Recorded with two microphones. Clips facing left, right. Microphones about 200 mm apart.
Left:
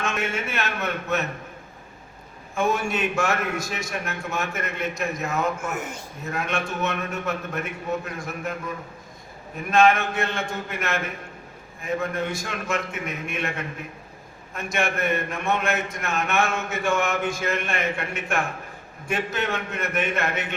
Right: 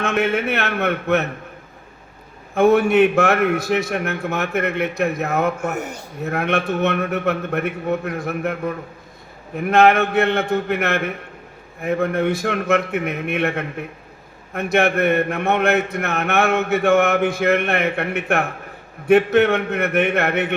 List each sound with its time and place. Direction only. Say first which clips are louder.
0.0 s a man's voice: right 8 dB; 60° right (ahead or behind)
2.6 s a man's voice: right 11 dB; 60° right (ahead or behind)